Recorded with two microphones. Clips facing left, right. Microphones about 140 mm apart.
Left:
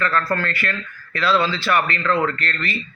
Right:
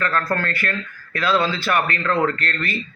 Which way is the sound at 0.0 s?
45° right (ahead or behind).